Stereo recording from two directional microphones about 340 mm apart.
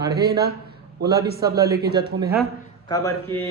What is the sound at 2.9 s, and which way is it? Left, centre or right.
Speech, centre.